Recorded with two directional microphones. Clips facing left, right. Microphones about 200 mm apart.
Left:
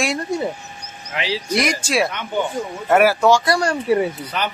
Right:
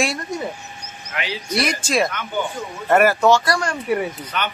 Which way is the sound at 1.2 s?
30° left (ahead or behind).